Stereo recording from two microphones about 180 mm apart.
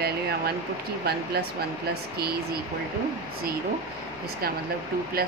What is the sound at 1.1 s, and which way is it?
Speech, 60° right (ahead or behind).